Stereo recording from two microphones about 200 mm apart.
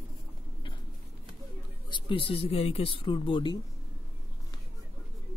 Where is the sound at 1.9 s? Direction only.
25° left (ahead or behind).